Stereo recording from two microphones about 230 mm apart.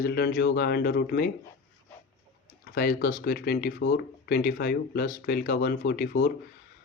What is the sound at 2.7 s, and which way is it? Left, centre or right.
Speech, left.